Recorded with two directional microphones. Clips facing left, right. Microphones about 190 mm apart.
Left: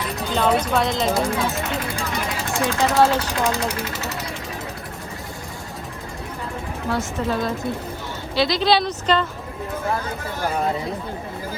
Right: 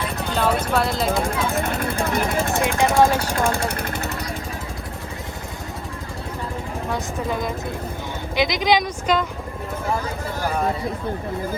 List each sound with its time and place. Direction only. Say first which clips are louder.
0.3 s speech: left 1 dB; centre (ahead or behind)
1.2 s speech: even; 55° right (ahead or behind)
2.6 s speech: even; 15° right (ahead or behind)
3.2 s speech: right 1 dB; 50° right (ahead or behind)
6.9 s speech: left 3 dB; 15° right (ahead or behind)